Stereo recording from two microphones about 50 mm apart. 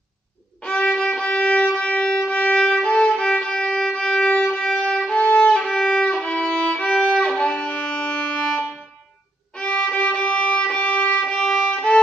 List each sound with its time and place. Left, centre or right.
0.7 s violin: left
9.6 s violin: left